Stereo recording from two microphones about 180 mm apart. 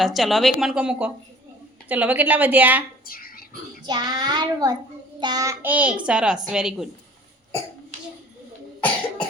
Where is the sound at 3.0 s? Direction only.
55° left (ahead or behind).